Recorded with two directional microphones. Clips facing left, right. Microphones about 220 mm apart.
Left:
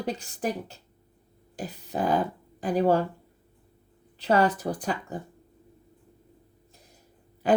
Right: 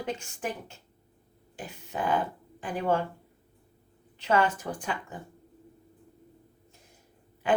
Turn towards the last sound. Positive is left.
turn(degrees=40)  # may be behind; listen again after turning